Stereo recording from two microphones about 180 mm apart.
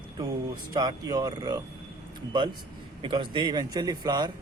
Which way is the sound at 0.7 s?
20° right (ahead or behind).